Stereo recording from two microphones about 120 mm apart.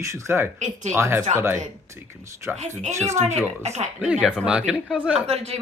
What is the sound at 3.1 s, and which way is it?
Speech, 75° right (ahead or behind).